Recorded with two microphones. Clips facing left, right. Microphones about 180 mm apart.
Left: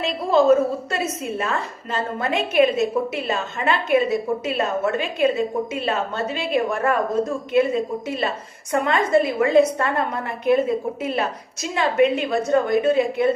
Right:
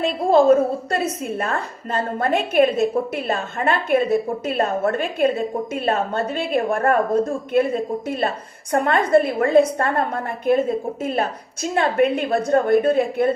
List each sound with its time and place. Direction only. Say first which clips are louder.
0.0 s a woman's voice: right 2 dB; 50° right (ahead or behind)
11.0 s a woman's voice: right 1 dB; 50° right (ahead or behind)